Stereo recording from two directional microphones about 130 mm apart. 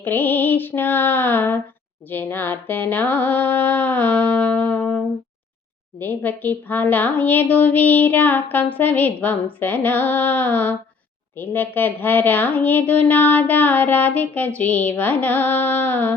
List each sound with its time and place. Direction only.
0.0 s a woman's voice: 15° left (ahead or behind)
6.0 s a woman's voice: 15° left (ahead or behind)